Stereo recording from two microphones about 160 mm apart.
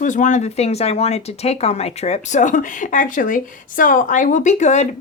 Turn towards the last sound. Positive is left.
turn(degrees=45)  # may be behind; listen again after turning